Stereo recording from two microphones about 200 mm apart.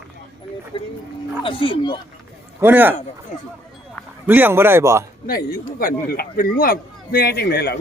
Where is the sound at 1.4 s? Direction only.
25° left (ahead or behind).